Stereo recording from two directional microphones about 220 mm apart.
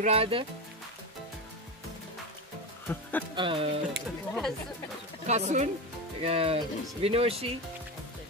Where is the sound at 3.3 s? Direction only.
25° right (ahead or behind).